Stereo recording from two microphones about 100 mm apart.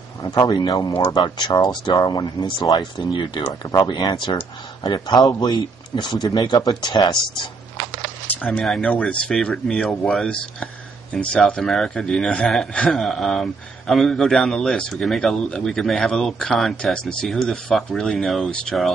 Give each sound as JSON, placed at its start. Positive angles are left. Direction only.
{"t": 0.2, "sound": "speech", "side_deg": 40}
{"t": 8.3, "sound": "a sound", "side_deg": 15}
{"t": 8.6, "sound": "speech", "side_deg": 10}